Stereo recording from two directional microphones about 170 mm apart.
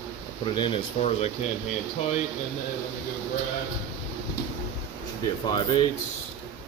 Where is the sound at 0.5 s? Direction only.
30° left (ahead or behind).